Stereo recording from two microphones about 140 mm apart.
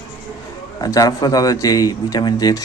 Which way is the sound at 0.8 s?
25° left (ahead or behind).